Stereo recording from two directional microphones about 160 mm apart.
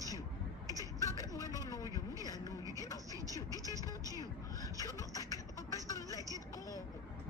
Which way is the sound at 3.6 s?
20° right (ahead or behind).